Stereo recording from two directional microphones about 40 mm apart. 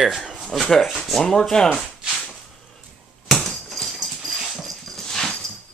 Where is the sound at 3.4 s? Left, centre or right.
Centre.